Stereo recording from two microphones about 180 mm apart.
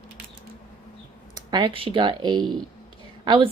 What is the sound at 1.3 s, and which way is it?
A woman's voice, 25° right (ahead or behind).